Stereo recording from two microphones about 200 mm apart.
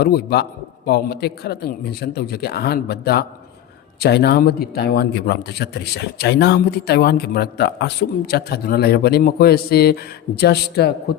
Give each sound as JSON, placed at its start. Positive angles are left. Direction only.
{"t": 0.0, "sound": "a man's voice", "side_deg": 50}